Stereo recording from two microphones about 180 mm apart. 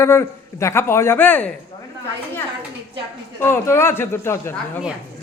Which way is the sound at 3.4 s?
15° left (ahead or behind).